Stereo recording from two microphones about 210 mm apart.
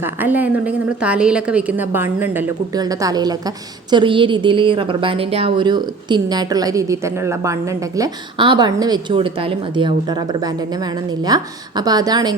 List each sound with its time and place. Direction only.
0.0 s a woman's voice: 10° right (ahead or behind)